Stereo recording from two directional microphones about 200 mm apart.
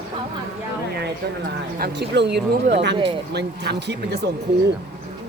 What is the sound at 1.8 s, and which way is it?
Speech, 60° right (ahead or behind).